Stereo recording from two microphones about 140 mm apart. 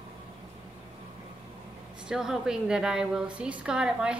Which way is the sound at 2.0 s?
5° right (ahead or behind).